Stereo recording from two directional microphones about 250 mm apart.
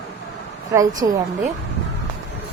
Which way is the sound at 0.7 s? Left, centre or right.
Centre.